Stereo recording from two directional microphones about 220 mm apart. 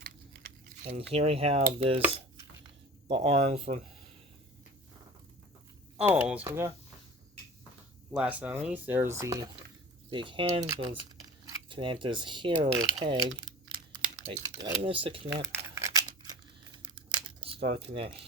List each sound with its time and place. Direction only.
1.1 s speech: 25° right (ahead or behind)
3.1 s speech: 25° right (ahead or behind)
6.0 s speech: 5° right (ahead or behind)
8.1 s speech: 5° right (ahead or behind); by 15.3 s 25° right (ahead or behind)
15.5 s tearing: 10° right (ahead or behind)
17.4 s speech: 25° right (ahead or behind)